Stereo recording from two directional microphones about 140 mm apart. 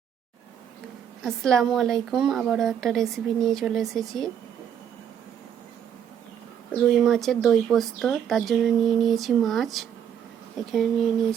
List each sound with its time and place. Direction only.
1.2 s a woman's voice: 5° left (ahead or behind)
6.8 s a woman's voice: centre (ahead or behind)